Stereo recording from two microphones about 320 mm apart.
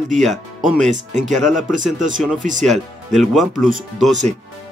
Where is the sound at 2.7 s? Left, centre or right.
Centre.